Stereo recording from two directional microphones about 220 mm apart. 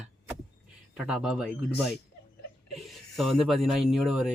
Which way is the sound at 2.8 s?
Centre (ahead or behind).